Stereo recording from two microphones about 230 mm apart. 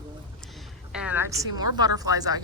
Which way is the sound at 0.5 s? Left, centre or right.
Centre.